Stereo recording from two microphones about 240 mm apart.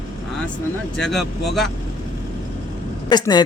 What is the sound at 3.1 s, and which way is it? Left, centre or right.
Speech, centre.